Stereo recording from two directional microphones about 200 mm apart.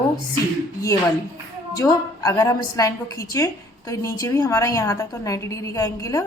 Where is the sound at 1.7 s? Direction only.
15° left (ahead or behind).